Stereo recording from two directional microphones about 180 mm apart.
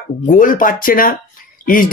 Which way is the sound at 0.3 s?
50° left (ahead or behind).